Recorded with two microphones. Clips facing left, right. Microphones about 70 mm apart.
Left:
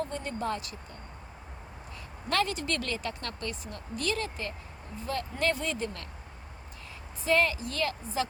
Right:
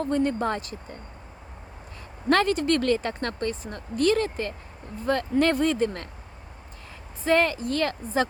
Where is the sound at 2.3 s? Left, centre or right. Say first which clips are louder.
Right 8 dB; right.